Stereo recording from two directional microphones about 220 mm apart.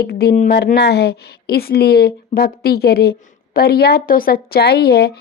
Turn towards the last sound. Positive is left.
turn(degrees=45)  # may be behind; listen again after turning